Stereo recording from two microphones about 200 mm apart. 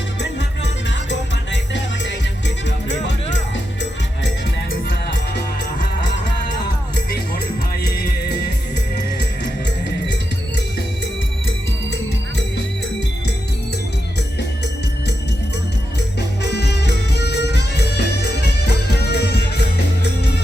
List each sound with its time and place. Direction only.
0.2 s music: 60° left (ahead or behind)
16.4 s music: 55° left (ahead or behind)